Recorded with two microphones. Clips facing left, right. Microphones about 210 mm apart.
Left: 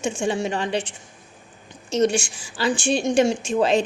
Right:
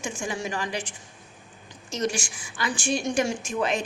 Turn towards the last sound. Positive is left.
turn(degrees=30)  # may be behind; listen again after turning